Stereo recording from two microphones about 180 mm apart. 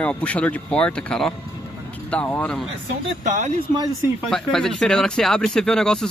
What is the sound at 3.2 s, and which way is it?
Speech, 40° right (ahead or behind).